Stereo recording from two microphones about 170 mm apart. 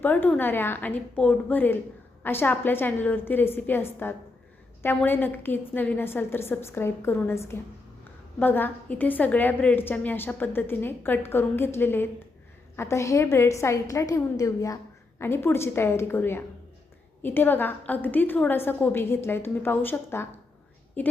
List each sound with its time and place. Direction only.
0.0 s a woman's voice: 10° left (ahead or behind)